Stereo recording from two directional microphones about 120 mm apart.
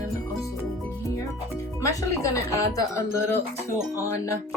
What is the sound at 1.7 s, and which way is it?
Speech, 25° left (ahead or behind).